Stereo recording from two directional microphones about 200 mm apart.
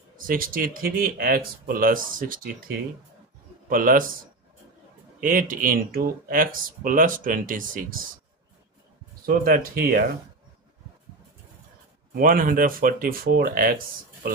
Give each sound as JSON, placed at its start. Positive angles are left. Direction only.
{"t": 0.3, "sound": "speech", "side_deg": -45}
{"t": 5.2, "sound": "speech", "side_deg": -40}
{"t": 9.2, "sound": "speech", "side_deg": -45}
{"t": 12.1, "sound": "speech", "side_deg": -45}